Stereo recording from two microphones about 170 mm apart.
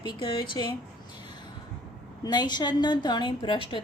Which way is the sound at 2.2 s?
25° left (ahead or behind).